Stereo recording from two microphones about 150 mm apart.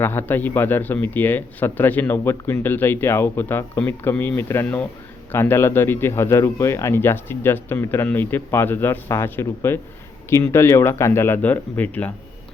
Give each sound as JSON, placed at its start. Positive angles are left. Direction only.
{"t": 0.0, "sound": "speech", "side_deg": 15}